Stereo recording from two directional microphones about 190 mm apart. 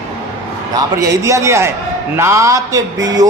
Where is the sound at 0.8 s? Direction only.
15° right (ahead or behind).